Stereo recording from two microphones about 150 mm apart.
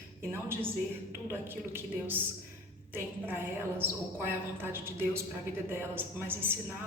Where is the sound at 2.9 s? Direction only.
15° right (ahead or behind).